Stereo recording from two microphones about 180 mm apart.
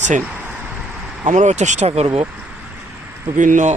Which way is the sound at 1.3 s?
40° right (ahead or behind).